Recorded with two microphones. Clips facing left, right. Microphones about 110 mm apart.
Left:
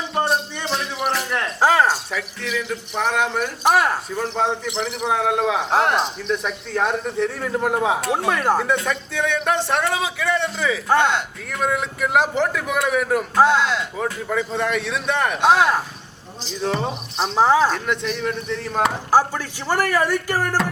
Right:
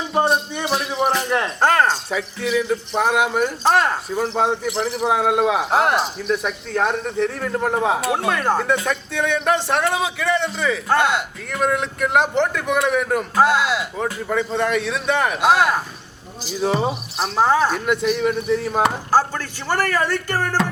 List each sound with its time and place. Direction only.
0.1 s a sound: centre (ahead or behind)
1.6 s cricket: 5° left (ahead or behind)
2.0 s speech: 15° right (ahead or behind)
3.6 s speech: 10° left (ahead or behind)
4.1 s a man's voice: 10° right (ahead or behind)
17.3 s speech: 10° left (ahead or behind)
17.6 s speech: 5° right (ahead or behind)
19.1 s speech: 15° left (ahead or behind)